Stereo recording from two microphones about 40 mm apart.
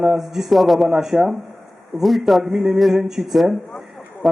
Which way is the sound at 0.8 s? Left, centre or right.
Centre.